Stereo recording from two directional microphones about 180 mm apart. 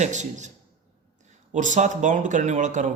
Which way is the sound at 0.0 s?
40° right (ahead or behind).